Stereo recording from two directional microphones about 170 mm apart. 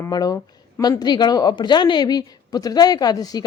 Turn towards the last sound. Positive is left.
turn(degrees=20)  # may be behind; listen again after turning